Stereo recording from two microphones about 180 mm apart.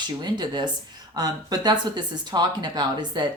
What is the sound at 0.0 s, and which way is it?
Speech, 25° right (ahead or behind).